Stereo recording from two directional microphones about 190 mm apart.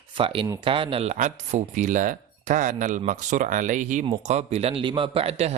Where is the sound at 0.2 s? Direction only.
25° right (ahead or behind).